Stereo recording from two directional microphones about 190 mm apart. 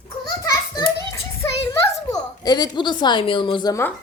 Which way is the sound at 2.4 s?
20° left (ahead or behind).